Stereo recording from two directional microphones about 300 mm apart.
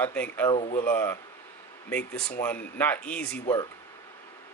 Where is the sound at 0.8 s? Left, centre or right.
Centre.